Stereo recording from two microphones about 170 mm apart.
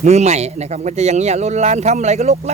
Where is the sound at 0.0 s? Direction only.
40° right (ahead or behind).